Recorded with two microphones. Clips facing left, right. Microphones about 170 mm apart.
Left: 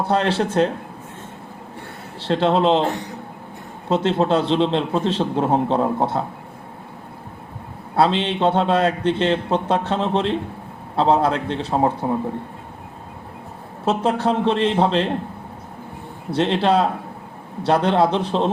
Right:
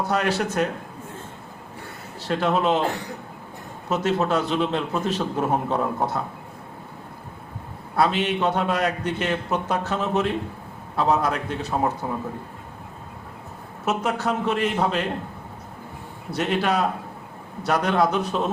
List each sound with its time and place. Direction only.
0.0 s a man's voice: 30° left (ahead or behind)
2.2 s a man's voice: 30° left (ahead or behind)
3.8 s a man's voice: 30° left (ahead or behind)
7.9 s a man's voice: 30° left (ahead or behind)
13.8 s a man's voice: 30° left (ahead or behind)
16.3 s a man's voice: 30° left (ahead or behind)